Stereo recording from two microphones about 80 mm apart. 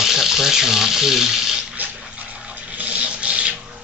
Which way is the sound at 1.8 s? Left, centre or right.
Centre.